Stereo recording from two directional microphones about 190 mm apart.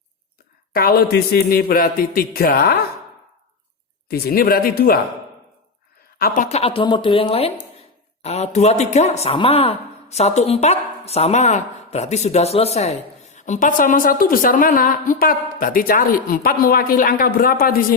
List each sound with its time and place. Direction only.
0.7 s a man's voice: 50° left (ahead or behind)
4.1 s a man's voice: 50° left (ahead or behind)
6.1 s speech: 50° left (ahead or behind)